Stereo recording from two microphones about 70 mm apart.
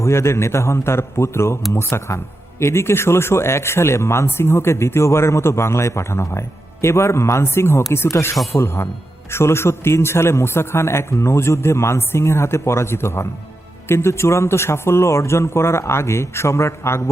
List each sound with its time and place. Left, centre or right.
0.0 s speech: left